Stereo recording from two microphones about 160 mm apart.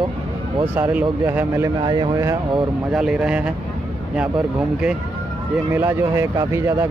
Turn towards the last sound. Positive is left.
turn(degrees=-15)  # may be behind; listen again after turning